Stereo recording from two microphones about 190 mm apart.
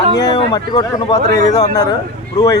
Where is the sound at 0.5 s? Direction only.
20° left (ahead or behind).